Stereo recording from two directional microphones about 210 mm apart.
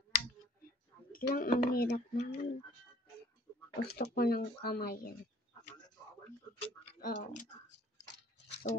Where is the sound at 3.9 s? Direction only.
45° left (ahead or behind).